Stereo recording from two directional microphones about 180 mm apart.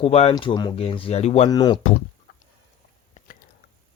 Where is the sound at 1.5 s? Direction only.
25° left (ahead or behind).